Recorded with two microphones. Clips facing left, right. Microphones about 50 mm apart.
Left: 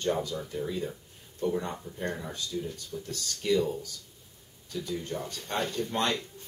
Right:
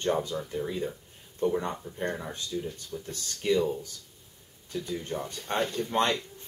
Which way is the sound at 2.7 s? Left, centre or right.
Centre.